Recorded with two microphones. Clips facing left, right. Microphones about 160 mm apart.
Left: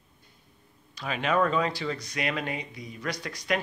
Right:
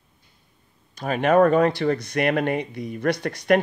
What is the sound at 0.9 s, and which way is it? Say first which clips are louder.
Speech: right 8 dB; 50° right (ahead or behind).